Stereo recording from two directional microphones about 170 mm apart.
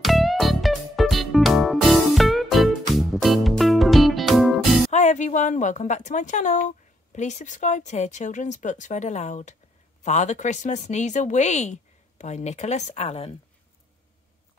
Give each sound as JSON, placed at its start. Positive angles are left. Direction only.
{"t": 0.0, "sound": "music", "side_deg": 0}
{"t": 4.9, "sound": "speech", "side_deg": 45}